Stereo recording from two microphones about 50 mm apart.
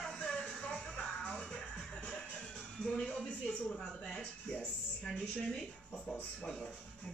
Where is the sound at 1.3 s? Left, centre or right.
Centre.